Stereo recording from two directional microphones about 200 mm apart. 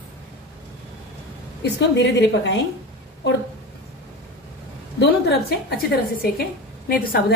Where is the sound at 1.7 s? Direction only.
60° left (ahead or behind).